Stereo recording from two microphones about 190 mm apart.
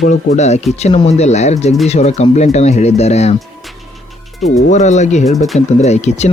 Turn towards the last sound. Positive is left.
turn(degrees=35)  # may be behind; listen again after turning